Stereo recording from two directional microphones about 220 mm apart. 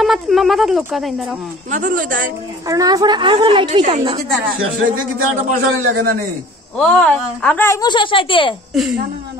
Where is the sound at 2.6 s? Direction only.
15° right (ahead or behind).